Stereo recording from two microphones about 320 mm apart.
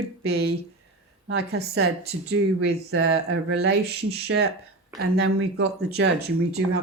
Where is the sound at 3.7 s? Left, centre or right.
Right.